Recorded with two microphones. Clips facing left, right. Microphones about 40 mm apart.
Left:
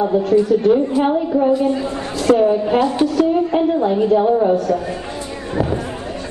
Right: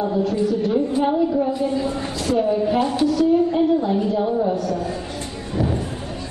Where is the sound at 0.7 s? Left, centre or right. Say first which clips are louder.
Left 5 dB; left.